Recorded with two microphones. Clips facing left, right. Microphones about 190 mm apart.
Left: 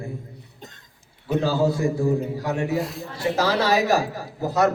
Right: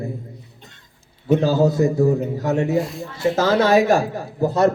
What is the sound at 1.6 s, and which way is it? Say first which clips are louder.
Speech: right 4 dB; 20° right (ahead or behind).